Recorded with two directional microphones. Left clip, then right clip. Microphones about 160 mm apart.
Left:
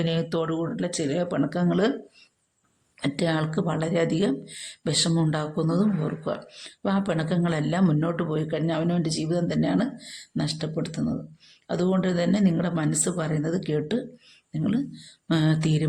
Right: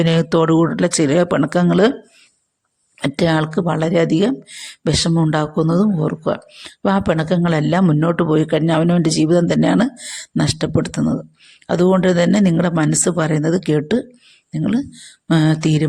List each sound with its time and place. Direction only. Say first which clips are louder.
0.0 s speech: right 11 dB; 50° right (ahead or behind)
3.0 s speech: right 9 dB; 40° right (ahead or behind)